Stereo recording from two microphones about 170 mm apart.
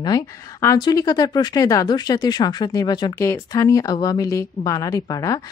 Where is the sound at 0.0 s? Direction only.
20° left (ahead or behind).